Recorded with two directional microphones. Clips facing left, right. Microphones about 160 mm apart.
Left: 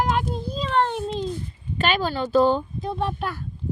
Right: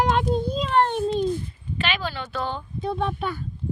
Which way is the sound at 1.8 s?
45° left (ahead or behind).